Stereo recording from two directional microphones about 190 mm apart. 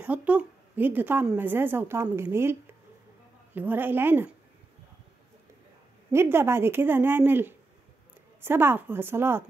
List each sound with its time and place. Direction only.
0.0 s a woman's voice: 10° right (ahead or behind)
6.1 s a woman's voice: 10° right (ahead or behind)